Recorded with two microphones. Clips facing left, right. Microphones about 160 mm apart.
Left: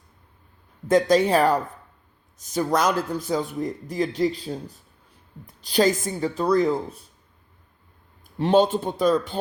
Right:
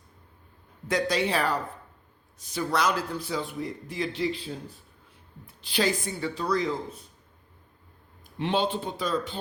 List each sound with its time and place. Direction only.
0.9 s speech: 45° left (ahead or behind)
8.4 s speech: 40° left (ahead or behind)